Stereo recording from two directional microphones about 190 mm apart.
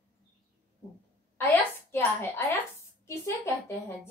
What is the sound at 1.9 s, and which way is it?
A woman's voice, 10° left (ahead or behind).